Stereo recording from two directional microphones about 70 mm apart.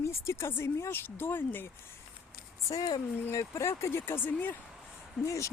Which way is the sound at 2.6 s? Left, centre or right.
Left.